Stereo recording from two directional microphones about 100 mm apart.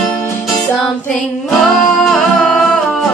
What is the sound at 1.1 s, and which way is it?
Music, 5° left (ahead or behind).